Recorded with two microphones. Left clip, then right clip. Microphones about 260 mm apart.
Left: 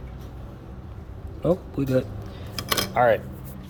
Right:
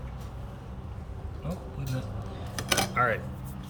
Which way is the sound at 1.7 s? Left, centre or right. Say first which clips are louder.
Left 14 dB; centre.